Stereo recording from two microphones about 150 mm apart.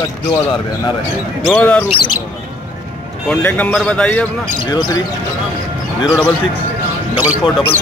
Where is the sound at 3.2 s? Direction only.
10° left (ahead or behind).